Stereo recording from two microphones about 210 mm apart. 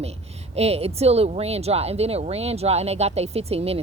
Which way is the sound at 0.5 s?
30° right (ahead or behind).